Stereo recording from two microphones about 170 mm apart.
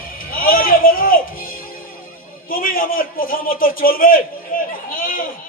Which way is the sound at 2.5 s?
55° left (ahead or behind).